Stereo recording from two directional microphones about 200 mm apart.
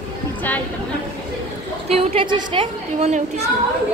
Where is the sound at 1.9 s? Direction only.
25° right (ahead or behind).